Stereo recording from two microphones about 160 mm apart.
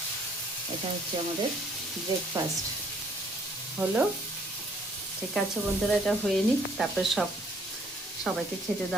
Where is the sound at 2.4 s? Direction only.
25° right (ahead or behind).